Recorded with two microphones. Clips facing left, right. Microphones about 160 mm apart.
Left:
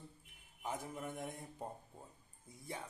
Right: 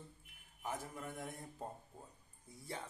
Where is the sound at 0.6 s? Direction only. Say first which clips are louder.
Left 1 dB; 20° left (ahead or behind).